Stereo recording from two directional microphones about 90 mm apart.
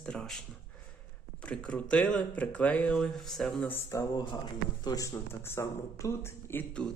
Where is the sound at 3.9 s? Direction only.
35° left (ahead or behind).